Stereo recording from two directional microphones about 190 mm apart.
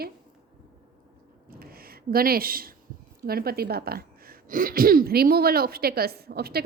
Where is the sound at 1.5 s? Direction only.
50° right (ahead or behind).